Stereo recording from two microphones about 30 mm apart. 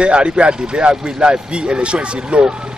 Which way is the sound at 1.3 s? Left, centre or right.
Right.